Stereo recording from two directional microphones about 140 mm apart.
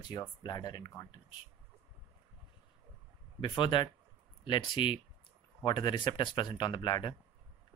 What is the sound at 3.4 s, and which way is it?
Speech, 35° left (ahead or behind).